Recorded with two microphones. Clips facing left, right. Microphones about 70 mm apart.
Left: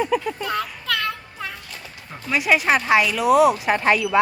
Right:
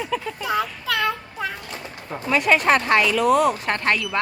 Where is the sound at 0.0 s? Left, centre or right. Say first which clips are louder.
Left 5 dB; centre.